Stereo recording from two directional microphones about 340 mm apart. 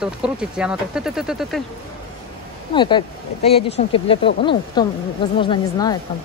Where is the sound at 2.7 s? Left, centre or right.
Centre.